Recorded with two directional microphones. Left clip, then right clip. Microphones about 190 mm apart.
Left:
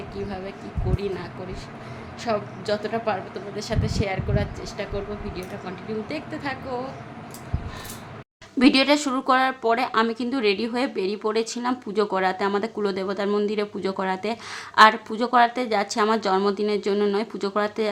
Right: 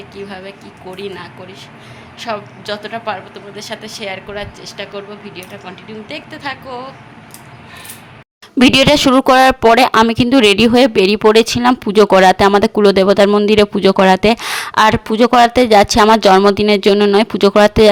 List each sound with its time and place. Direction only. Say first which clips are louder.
0.3 s a woman's voice: right 4 dB; 5° left (ahead or behind)
8.5 s speech: right 9 dB; 45° right (ahead or behind)